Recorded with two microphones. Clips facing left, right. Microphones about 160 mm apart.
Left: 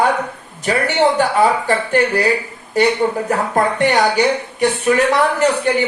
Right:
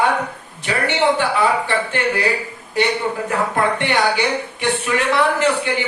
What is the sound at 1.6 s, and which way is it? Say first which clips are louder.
Speech: left 4 dB; 40° left (ahead or behind).